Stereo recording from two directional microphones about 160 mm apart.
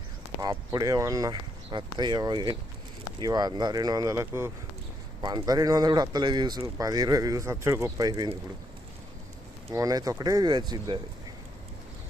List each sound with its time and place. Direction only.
0.3 s speech: 20° right (ahead or behind)
9.7 s speech: 25° right (ahead or behind)